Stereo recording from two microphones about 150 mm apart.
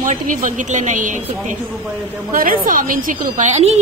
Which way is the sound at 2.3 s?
70° right (ahead or behind).